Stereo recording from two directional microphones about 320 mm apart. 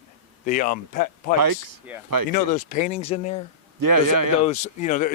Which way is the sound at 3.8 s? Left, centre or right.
Right.